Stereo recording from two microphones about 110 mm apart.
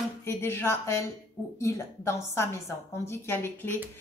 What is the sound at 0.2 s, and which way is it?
A woman's voice, 20° left (ahead or behind).